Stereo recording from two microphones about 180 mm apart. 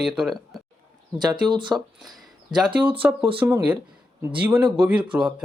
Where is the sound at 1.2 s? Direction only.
25° right (ahead or behind).